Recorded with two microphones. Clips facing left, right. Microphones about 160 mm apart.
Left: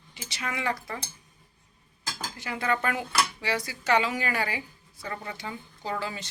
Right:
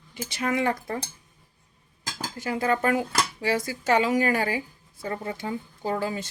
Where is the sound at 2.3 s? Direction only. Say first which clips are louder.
Right 4 dB; 40° right (ahead or behind).